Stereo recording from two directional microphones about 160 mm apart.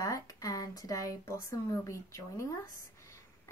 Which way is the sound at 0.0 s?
20° left (ahead or behind).